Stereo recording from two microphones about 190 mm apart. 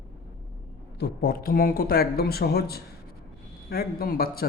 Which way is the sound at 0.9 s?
55° left (ahead or behind).